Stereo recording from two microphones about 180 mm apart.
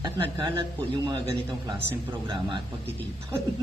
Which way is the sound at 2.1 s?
25° right (ahead or behind).